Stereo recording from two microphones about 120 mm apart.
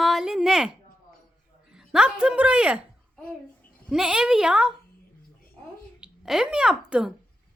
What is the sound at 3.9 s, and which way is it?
Speech, 5° right (ahead or behind).